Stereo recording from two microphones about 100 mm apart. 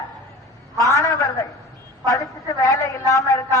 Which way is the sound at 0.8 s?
35° left (ahead or behind).